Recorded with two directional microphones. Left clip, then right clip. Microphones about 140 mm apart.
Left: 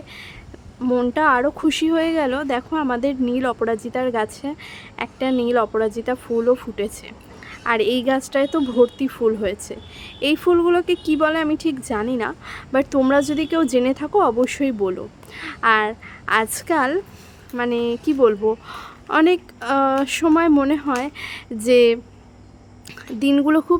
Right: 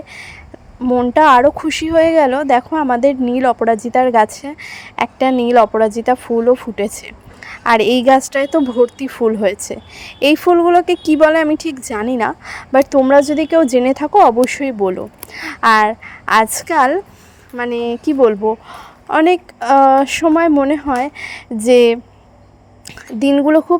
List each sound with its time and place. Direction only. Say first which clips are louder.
0.8 s speech: right 5 dB; 25° right (ahead or behind)
1.1 s a woman's voice: right 11 dB; 40° right (ahead or behind)
13.0 s a woman's voice: right 6 dB; 30° right (ahead or behind)